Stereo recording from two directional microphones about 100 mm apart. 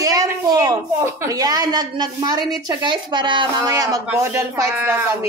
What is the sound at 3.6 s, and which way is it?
A woman's voice, 40° right (ahead or behind).